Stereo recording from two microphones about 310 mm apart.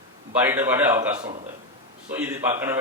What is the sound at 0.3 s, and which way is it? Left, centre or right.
A man's voice, centre.